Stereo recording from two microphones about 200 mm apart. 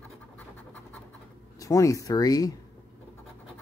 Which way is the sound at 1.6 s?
15° left (ahead or behind).